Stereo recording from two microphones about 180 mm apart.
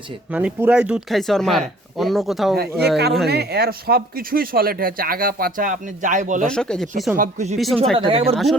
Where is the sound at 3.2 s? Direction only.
65° right (ahead or behind); by 6.5 s 45° right (ahead or behind).